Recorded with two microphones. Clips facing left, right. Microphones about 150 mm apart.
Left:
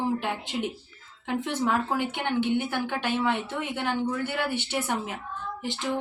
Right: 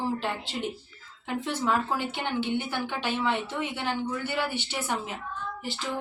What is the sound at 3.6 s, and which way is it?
Speech, 55° left (ahead or behind).